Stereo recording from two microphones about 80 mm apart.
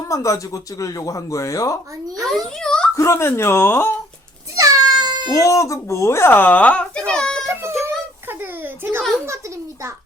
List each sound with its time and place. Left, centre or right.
0.1 s speech: left
2.3 s a child's voice: centre
2.9 s speech: left
4.5 s cat: right
5.3 s speech: left; by 7.4 s centre
7.4 s a sound: right